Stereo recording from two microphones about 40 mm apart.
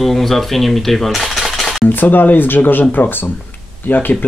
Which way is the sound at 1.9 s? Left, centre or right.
Left.